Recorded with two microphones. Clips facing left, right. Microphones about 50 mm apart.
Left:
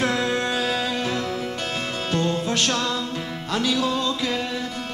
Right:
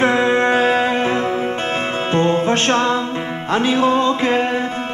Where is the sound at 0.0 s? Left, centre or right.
Right.